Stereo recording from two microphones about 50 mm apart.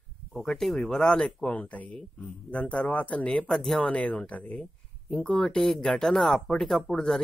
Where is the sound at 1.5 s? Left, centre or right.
Left.